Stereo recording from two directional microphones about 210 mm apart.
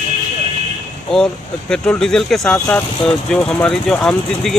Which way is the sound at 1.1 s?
5° left (ahead or behind).